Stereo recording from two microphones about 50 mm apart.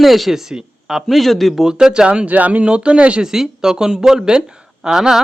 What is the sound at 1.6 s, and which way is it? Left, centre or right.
Speech, centre.